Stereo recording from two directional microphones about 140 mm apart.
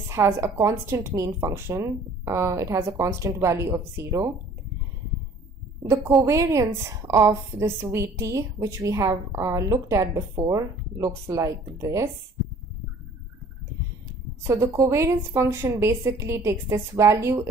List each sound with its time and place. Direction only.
0.1 s a woman's voice: 20° right (ahead or behind)
6.2 s a woman's voice: 20° right (ahead or behind)
14.4 s a woman's voice: 20° right (ahead or behind)